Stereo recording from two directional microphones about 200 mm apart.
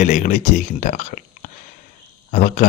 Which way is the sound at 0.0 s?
35° left (ahead or behind).